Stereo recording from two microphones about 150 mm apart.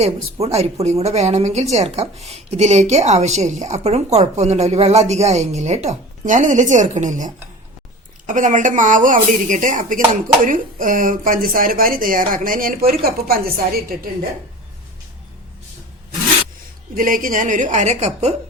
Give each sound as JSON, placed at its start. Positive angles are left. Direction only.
{"t": 0.0, "sound": "speech", "side_deg": -45}
{"t": 8.3, "sound": "a woman's voice", "side_deg": -55}
{"t": 16.9, "sound": "a woman's voice", "side_deg": -65}